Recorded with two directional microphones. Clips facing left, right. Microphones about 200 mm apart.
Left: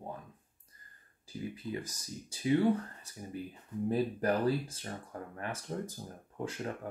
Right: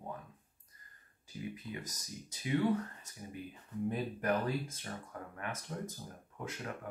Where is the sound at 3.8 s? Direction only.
35° left (ahead or behind).